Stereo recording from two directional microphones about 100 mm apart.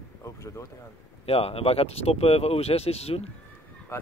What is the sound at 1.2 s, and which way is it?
Speech, 75° left (ahead or behind).